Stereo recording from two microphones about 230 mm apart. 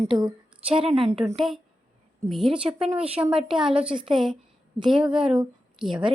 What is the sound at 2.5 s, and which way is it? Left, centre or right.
Speech, right.